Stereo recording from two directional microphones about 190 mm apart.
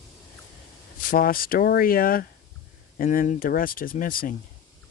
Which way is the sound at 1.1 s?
50° left (ahead or behind).